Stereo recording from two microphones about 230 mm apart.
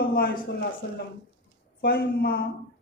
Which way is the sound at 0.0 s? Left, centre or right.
Left.